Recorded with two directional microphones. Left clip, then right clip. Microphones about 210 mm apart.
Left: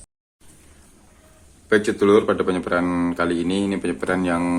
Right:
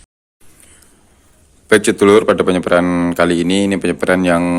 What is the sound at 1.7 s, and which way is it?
Speech, 45° right (ahead or behind).